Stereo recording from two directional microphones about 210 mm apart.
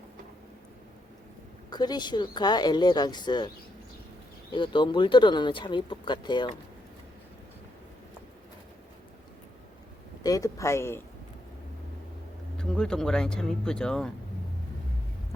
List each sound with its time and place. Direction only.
1.7 s speech: 20° left (ahead or behind)
4.5 s speech: 25° left (ahead or behind)
10.2 s speech: 15° left (ahead or behind)
12.5 s speech: 5° left (ahead or behind)